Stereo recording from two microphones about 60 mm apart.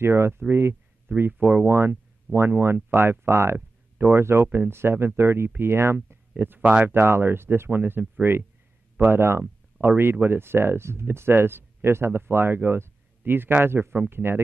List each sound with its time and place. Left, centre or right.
0.0 s speech: right